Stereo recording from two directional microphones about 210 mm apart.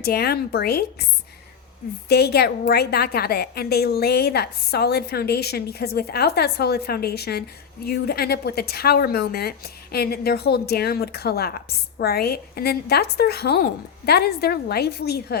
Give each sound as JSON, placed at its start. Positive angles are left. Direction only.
{"t": 0.0, "sound": "a woman's voice", "side_deg": 50}
{"t": 2.0, "sound": "a woman's voice", "side_deg": 50}